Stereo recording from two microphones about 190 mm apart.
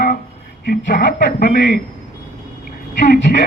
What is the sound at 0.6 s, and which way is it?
Speech, 50° left (ahead or behind).